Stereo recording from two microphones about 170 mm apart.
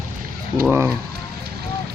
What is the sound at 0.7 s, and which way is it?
Speech, 15° right (ahead or behind).